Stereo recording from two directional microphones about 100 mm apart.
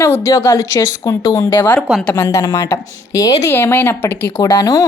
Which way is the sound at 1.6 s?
20° left (ahead or behind).